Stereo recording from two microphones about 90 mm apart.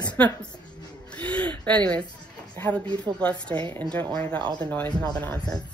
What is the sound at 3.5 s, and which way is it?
Speech, 60° right (ahead or behind).